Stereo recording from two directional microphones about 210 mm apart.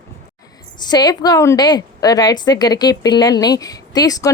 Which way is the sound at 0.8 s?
20° left (ahead or behind).